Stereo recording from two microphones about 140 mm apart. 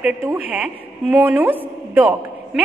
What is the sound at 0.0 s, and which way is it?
A woman's voice, 15° right (ahead or behind).